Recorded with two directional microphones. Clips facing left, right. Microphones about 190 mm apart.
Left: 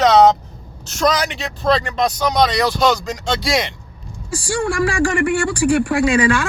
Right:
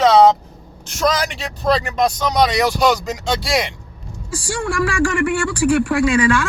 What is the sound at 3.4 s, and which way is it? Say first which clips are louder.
Speech: left 1 dB; centre (ahead or behind).